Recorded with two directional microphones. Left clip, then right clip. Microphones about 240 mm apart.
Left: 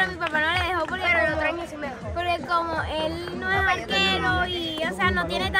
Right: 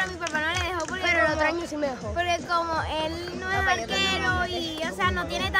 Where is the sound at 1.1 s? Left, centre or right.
Right.